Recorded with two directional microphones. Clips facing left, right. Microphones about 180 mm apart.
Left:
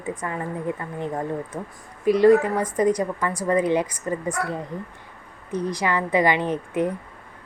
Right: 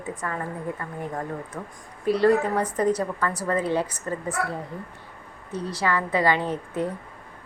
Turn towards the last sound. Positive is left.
turn(degrees=20)  # may be behind; listen again after turning